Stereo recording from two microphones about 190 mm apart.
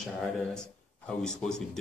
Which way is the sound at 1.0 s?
5° left (ahead or behind).